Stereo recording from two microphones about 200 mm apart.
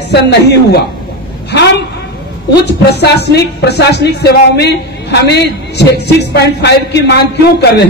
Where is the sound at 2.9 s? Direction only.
55° left (ahead or behind).